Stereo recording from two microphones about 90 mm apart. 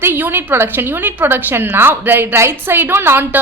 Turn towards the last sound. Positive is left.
turn(degrees=-25)  # may be behind; listen again after turning